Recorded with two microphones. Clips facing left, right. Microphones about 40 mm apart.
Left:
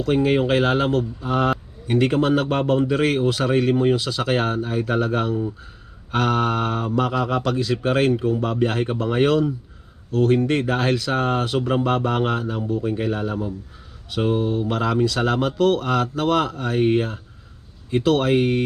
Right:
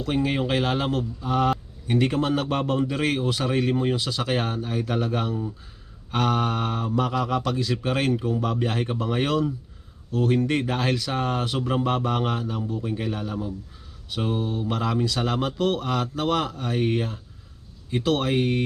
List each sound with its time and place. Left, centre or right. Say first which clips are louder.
0.0 s a man's voice: left 6 dB; centre
3.2 s speech: left 5 dB; centre
4.3 s a man's voice: left 6 dB; centre
8.4 s a man's voice: left 4 dB; left
18.1 s a man's voice: left 4 dB; centre